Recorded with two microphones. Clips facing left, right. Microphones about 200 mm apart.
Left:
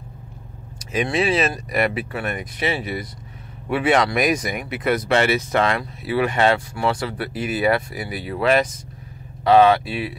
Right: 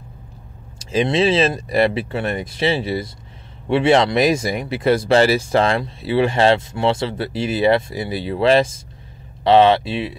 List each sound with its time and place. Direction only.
0.7 s speech: 25° right (ahead or behind)